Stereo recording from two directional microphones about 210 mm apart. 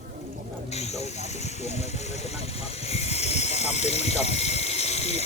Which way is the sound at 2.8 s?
30° left (ahead or behind).